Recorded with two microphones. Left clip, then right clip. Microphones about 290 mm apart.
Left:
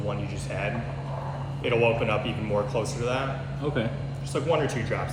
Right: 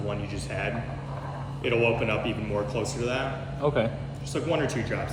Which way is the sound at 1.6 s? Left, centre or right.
Centre.